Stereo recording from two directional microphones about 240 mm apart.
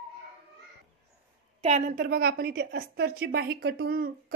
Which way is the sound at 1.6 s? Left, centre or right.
Right.